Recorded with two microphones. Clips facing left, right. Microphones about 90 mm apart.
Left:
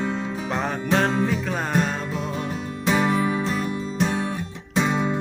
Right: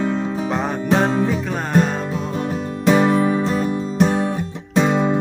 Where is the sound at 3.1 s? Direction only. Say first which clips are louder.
Right 5 dB; 35° right (ahead or behind).